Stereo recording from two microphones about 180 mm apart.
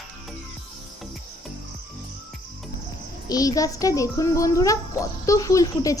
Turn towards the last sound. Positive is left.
turn(degrees=20)  # may be behind; listen again after turning